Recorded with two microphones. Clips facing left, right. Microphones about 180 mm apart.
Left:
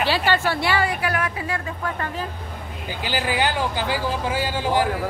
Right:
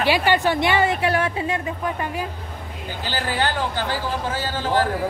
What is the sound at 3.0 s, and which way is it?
Speech, 15° left (ahead or behind).